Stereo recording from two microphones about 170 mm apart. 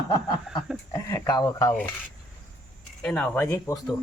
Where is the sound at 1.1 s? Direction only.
20° left (ahead or behind).